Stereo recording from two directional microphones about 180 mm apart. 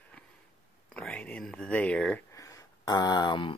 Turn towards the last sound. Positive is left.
turn(degrees=25)  # may be behind; listen again after turning